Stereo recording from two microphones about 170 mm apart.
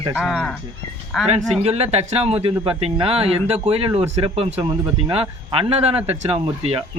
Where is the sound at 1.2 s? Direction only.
40° right (ahead or behind).